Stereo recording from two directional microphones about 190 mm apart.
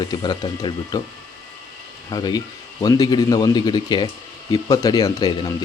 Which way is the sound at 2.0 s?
20° left (ahead or behind).